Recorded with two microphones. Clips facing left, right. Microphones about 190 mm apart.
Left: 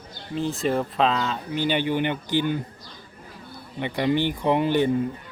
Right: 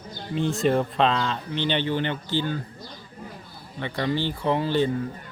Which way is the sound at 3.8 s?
15° left (ahead or behind).